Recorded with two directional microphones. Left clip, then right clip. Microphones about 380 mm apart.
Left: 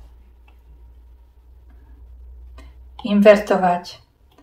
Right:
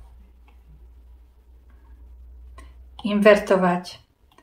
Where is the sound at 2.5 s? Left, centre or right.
Centre.